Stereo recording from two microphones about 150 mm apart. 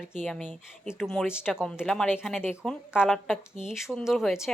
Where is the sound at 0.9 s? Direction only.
Centre (ahead or behind).